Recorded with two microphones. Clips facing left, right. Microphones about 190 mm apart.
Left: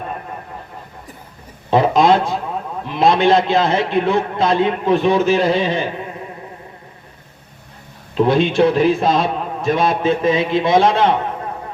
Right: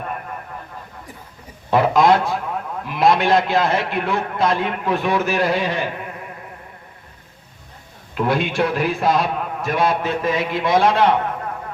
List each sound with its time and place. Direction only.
1.7 s a man's voice: 20° left (ahead or behind)
8.1 s a man's voice: 25° left (ahead or behind)